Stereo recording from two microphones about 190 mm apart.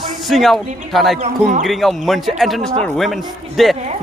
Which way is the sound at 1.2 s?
40° right (ahead or behind).